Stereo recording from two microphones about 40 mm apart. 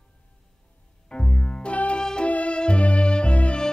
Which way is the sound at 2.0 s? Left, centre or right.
Centre.